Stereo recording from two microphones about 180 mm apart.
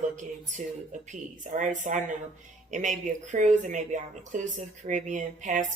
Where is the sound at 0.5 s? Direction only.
45° right (ahead or behind).